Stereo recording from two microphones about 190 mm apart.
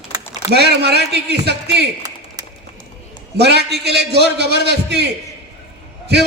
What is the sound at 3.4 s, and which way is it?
A man's voice, 60° right (ahead or behind).